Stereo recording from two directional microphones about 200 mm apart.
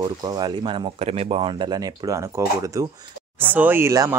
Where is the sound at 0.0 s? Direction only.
20° right (ahead or behind).